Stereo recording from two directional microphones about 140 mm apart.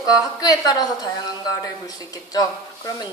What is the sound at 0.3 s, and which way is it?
A woman's voice, 30° left (ahead or behind).